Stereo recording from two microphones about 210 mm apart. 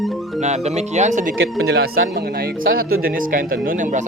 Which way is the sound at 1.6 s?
50° right (ahead or behind).